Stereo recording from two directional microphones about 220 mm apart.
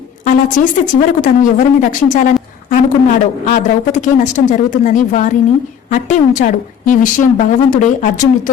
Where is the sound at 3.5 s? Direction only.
35° left (ahead or behind).